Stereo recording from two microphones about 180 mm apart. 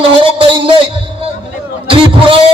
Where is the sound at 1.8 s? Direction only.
30° right (ahead or behind).